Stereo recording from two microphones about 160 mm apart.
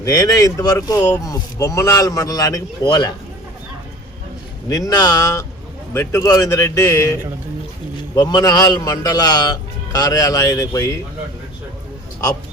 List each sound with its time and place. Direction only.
0.0 s speech: 20° left (ahead or behind)
4.7 s speech: 20° left (ahead or behind)